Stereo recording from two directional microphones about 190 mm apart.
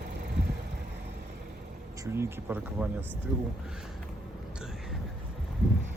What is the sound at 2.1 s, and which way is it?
Speech, 10° right (ahead or behind).